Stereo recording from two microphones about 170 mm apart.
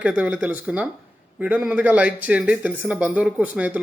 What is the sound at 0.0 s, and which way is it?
Speech, 10° right (ahead or behind).